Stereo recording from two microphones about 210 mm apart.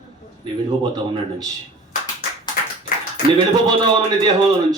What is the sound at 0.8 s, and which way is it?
Speech, 20° right (ahead or behind).